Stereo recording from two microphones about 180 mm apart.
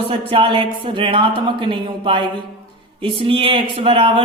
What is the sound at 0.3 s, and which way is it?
Speech, 30° right (ahead or behind).